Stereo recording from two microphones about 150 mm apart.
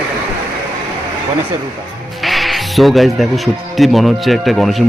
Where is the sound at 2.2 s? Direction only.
Centre (ahead or behind).